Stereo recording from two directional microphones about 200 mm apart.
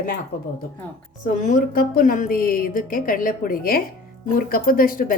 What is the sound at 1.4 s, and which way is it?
A woman's voice, 40° left (ahead or behind).